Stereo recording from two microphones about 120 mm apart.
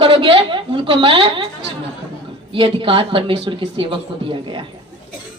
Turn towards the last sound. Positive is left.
turn(degrees=-45)  # may be behind; listen again after turning